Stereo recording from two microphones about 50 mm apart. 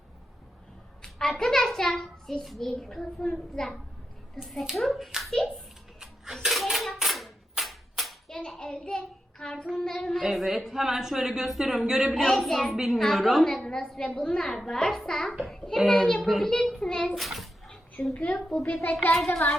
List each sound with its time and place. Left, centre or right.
1.0 s a child's voice: centre
6.4 s clapping: centre
8.3 s a child's voice: centre
10.2 s a woman's voice: centre
12.2 s a child's voice: centre
12.7 s a woman's voice: centre
13.2 s a child's voice: centre
17.2 s a child's voice: centre
18.1 s a woman's voice: left
19.1 s a child's voice: centre